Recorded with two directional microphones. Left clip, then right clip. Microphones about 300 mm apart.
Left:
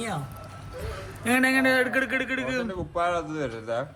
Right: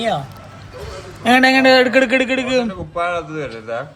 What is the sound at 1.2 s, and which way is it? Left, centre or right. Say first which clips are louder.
A man's voice: right 11 dB; centre.